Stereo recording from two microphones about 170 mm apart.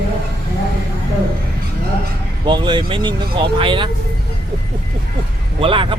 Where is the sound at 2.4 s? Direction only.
25° right (ahead or behind).